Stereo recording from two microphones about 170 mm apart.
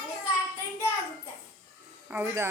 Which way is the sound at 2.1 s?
15° right (ahead or behind).